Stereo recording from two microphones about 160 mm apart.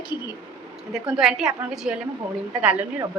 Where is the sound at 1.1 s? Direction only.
5° right (ahead or behind).